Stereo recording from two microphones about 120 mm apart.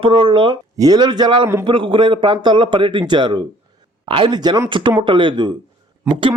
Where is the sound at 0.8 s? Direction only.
35° right (ahead or behind).